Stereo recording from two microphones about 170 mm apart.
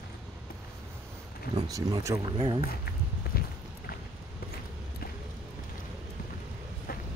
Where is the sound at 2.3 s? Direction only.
30° right (ahead or behind).